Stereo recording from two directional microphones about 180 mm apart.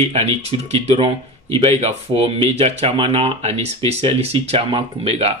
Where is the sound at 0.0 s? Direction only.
35° right (ahead or behind).